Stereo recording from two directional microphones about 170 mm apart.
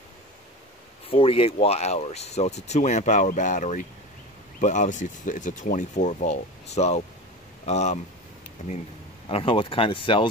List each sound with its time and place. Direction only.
1.0 s speech: 35° left (ahead or behind)
9.3 s speech: 30° left (ahead or behind)